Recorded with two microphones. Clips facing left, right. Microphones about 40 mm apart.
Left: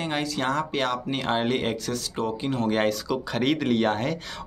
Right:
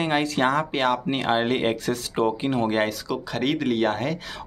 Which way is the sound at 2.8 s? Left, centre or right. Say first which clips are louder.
Even; centre.